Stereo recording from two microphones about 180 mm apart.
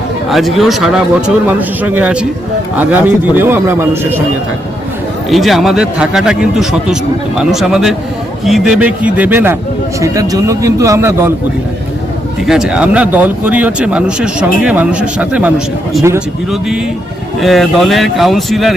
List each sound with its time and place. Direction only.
0.3 s a man's voice: centre (ahead or behind)
5.3 s a man's voice: centre (ahead or behind)
12.5 s a man's voice: 5° right (ahead or behind)